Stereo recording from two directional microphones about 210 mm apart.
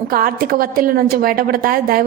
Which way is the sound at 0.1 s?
45° right (ahead or behind).